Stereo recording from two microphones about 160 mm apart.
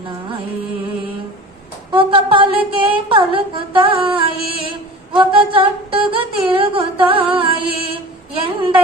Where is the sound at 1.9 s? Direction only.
35° right (ahead or behind).